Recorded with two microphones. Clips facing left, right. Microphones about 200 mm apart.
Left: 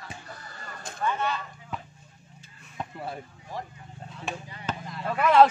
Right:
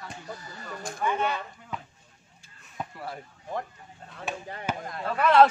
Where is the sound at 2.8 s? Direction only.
Centre (ahead or behind).